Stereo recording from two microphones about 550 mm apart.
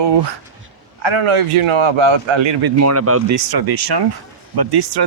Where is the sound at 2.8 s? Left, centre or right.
Right.